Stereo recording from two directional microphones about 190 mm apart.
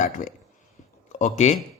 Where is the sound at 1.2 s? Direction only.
40° left (ahead or behind).